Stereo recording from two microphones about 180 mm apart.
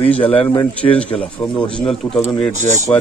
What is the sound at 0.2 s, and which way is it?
Speech, 30° left (ahead or behind).